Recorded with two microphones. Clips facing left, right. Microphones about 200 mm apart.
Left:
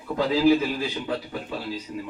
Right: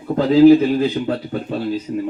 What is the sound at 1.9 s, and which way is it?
Speech, 40° right (ahead or behind).